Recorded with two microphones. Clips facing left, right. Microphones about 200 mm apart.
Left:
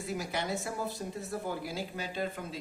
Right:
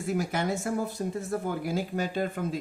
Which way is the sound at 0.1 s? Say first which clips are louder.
Right 6 dB; 50° right (ahead or behind).